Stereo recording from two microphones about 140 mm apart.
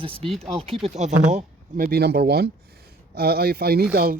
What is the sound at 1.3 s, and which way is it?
Speech, 75° right (ahead or behind).